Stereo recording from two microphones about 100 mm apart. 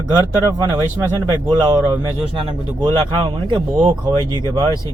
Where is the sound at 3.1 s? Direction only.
50° right (ahead or behind).